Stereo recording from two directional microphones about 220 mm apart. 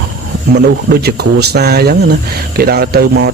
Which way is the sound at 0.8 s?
45° right (ahead or behind).